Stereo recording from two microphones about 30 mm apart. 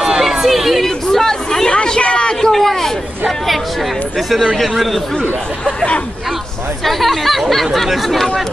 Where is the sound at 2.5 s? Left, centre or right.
Centre.